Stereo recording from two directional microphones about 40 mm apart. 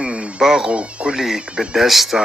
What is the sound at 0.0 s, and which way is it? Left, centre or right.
Insect, right.